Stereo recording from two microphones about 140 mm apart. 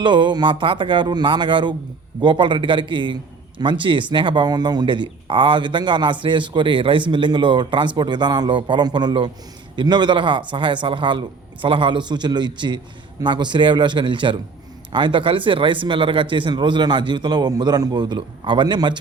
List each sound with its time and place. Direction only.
0.0 s speech: 35° right (ahead or behind)